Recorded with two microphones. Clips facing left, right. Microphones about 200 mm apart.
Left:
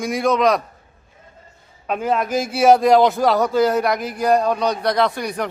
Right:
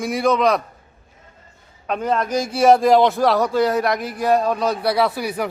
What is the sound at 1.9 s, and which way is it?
A man's voice, 5° left (ahead or behind).